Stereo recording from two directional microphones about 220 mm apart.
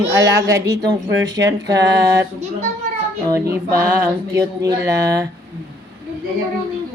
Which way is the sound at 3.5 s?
10° right (ahead or behind).